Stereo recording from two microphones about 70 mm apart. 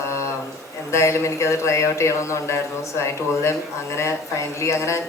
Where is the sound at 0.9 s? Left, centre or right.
Left.